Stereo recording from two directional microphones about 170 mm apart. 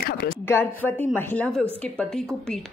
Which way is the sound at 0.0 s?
60° left (ahead or behind).